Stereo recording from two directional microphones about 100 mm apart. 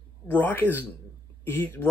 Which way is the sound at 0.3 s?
20° left (ahead or behind).